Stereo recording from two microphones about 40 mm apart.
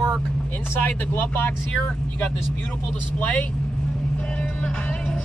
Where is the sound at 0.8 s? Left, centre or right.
Left.